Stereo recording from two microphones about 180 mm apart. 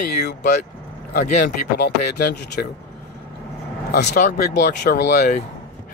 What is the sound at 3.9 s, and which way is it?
A man's voice, 60° left (ahead or behind).